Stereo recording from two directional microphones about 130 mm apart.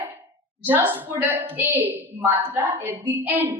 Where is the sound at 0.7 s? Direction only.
15° right (ahead or behind).